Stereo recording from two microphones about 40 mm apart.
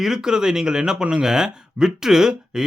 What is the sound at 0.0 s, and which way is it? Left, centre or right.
Speech, centre.